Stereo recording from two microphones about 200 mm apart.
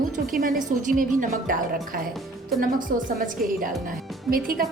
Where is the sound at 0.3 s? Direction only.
45° right (ahead or behind).